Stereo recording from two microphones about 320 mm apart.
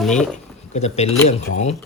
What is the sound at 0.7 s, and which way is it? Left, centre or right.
Speech, centre.